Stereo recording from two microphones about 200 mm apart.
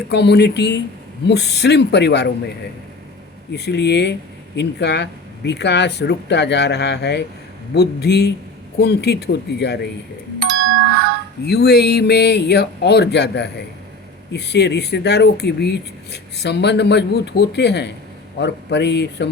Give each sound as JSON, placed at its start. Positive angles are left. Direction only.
{"t": 0.1, "sound": "speech", "side_deg": 55}
{"t": 3.5, "sound": "speech", "side_deg": 55}
{"t": 11.4, "sound": "speech", "side_deg": 55}